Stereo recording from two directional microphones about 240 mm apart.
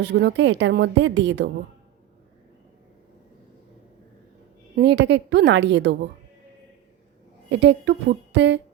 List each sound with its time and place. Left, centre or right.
0.0 s a woman's voice: right
4.7 s a woman's voice: right
7.5 s a woman's voice: right